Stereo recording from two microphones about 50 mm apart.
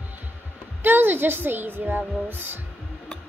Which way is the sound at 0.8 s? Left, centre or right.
Right.